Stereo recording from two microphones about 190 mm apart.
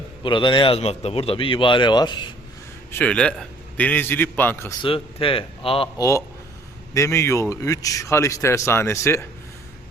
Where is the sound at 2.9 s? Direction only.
5° left (ahead or behind).